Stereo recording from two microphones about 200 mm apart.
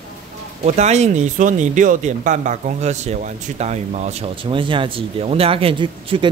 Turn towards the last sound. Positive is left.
turn(degrees=-25)  # may be behind; listen again after turning